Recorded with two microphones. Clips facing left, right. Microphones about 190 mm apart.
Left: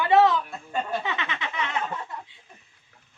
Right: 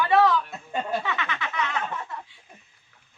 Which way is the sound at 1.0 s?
20° left (ahead or behind).